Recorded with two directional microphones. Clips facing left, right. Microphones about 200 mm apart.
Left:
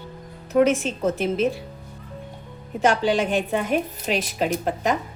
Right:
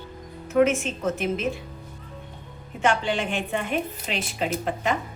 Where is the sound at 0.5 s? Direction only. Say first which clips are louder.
Left 2 dB; 40° left (ahead or behind).